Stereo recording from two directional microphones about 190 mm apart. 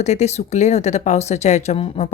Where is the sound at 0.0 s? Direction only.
35° left (ahead or behind).